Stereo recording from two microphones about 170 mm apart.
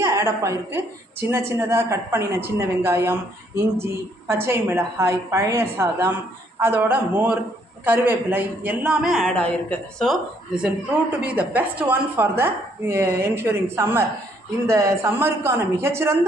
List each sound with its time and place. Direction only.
0.0 s a woman's voice: 15° right (ahead or behind)